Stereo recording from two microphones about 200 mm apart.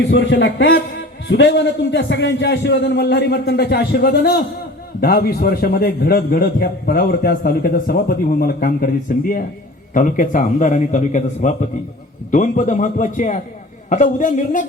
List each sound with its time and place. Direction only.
0.0 s a man's voice: 60° left (ahead or behind); by 14.6 s 40° left (ahead or behind)